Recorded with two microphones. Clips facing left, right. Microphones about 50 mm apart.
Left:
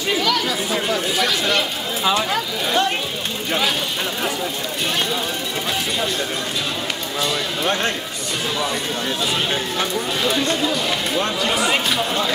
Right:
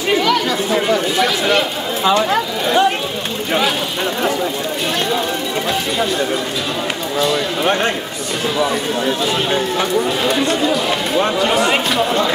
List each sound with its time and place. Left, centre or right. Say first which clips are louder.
0.1 s chatter: right 5 dB; right
0.7 s chatter: right 5 dB; centre
2.2 s speech: right 5 dB; centre
7.6 s speech: right 4 dB; right
8.5 s speech: right 6 dB; centre
11.1 s speech: right 7 dB; right
11.7 s speech: right 4 dB; centre